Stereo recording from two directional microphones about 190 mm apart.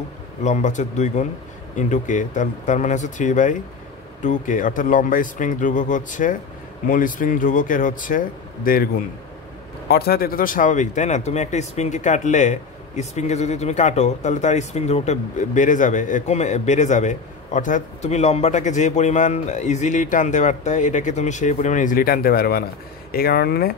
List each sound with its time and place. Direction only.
0.4 s speech: 40° left (ahead or behind)
9.8 s speech: 55° left (ahead or behind)